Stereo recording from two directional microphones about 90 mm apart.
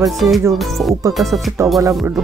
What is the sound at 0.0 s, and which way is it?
Music, centre (ahead or behind).